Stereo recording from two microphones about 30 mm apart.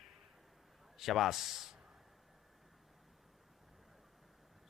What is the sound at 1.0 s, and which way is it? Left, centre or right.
Speech, centre.